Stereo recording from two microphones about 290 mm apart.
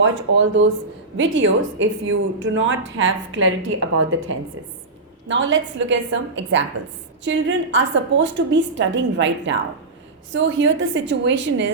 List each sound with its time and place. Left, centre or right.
0.0 s speech: right